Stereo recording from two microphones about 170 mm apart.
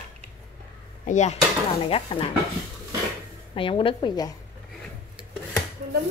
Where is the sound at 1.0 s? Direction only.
45° left (ahead or behind).